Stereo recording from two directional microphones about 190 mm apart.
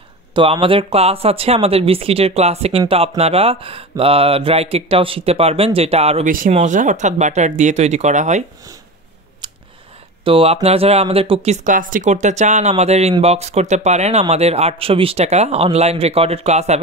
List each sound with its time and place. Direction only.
0.3 s speech: 25° right (ahead or behind)
10.2 s speech: 30° right (ahead or behind)